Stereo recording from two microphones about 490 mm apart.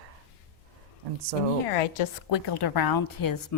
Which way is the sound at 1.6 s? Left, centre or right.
Left.